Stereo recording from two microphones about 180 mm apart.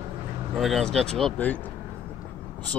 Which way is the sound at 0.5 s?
Centre (ahead or behind).